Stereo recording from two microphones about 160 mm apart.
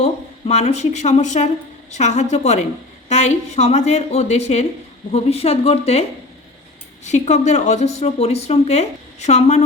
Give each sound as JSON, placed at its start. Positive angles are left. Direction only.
{"t": 0.0, "sound": "speech", "side_deg": 40}